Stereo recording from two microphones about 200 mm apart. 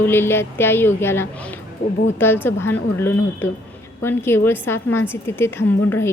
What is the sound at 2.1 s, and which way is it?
A woman's voice, 10° left (ahead or behind).